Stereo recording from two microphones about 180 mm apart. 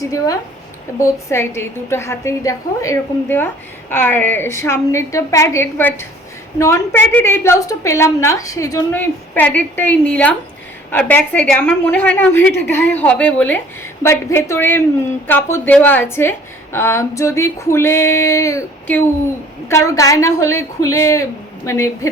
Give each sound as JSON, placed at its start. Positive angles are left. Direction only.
{"t": 0.9, "sound": "a woman's voice", "side_deg": 15}